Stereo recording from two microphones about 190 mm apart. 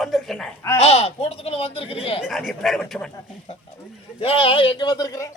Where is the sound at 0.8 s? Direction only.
35° left (ahead or behind).